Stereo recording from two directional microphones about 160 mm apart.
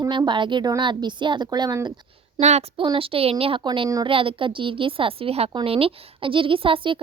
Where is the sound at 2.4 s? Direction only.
45° right (ahead or behind).